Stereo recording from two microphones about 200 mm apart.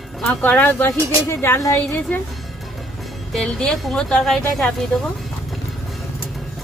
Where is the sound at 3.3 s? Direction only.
5° left (ahead or behind).